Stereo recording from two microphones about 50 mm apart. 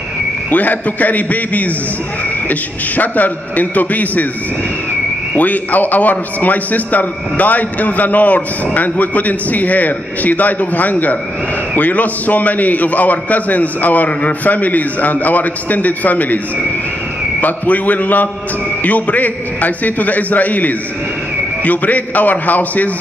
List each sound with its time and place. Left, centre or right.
0.5 s a man's voice: left
3.0 s a man's voice: left
5.3 s a man's voice: left
17.4 s a man's voice: left